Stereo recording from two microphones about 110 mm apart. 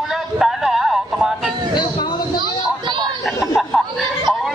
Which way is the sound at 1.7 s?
40° left (ahead or behind).